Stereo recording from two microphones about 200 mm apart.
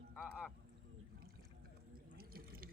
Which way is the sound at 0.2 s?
5° left (ahead or behind).